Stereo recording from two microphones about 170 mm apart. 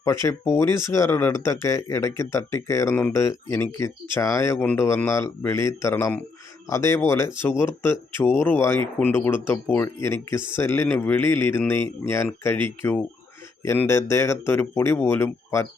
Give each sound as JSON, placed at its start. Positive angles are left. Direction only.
{"t": 0.0, "sound": "speech", "side_deg": 20}